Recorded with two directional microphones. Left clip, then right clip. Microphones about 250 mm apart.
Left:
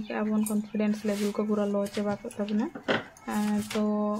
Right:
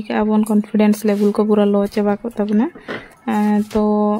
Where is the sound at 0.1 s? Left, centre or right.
Right.